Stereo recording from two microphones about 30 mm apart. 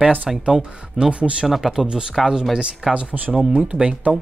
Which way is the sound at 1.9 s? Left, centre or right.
Right.